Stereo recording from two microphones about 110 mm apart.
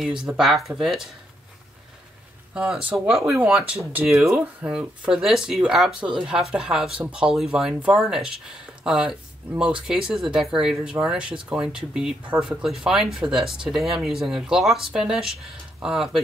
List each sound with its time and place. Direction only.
0.0 s speech: 10° right (ahead or behind)
2.5 s speech: 5° right (ahead or behind)